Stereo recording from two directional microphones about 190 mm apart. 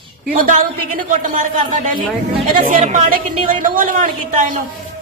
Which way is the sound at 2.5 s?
40° right (ahead or behind).